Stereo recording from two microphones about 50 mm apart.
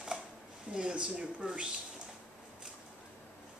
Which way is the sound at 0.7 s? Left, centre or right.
Right.